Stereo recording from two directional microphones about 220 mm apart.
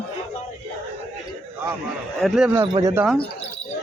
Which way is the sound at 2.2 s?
5° right (ahead or behind).